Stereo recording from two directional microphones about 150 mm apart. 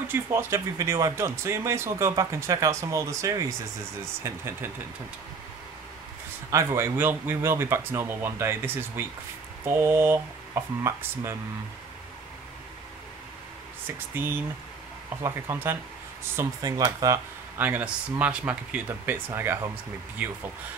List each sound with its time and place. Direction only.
0.1 s speech: 20° right (ahead or behind)
6.5 s speech: 20° right (ahead or behind)
13.9 s speech: 15° right (ahead or behind)